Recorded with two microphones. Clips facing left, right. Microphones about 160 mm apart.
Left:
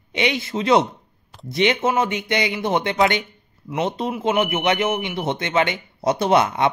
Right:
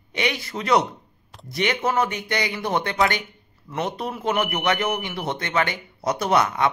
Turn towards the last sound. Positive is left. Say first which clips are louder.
# left 3 dB
turn(degrees=25)  # may be behind; listen again after turning